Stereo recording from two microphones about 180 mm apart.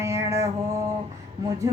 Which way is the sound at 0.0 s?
15° right (ahead or behind).